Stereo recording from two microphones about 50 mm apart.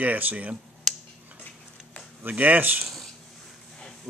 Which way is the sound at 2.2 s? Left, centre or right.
Right.